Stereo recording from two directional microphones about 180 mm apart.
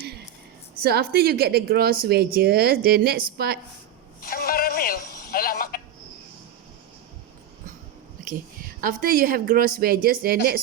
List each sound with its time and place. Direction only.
0.8 s a woman's voice: 60° right (ahead or behind)
4.2 s a sound: 55° left (ahead or behind)
8.2 s a woman's voice: 50° right (ahead or behind)